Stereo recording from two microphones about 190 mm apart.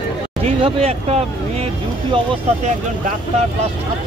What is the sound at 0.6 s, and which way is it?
Speech, 30° right (ahead or behind).